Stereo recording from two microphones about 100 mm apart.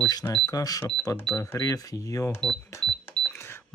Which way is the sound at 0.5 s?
35° left (ahead or behind).